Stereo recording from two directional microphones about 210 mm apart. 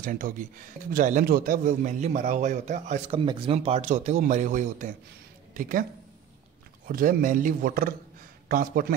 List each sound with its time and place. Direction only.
0.0 s a man's voice: 40° right (ahead or behind)
6.9 s a man's voice: 40° right (ahead or behind)